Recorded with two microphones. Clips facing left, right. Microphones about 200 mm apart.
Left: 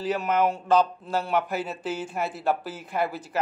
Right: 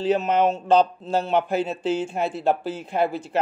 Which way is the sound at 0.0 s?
25° right (ahead or behind).